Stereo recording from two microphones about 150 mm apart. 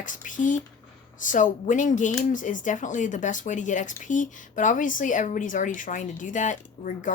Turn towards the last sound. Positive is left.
turn(degrees=60)  # may be behind; listen again after turning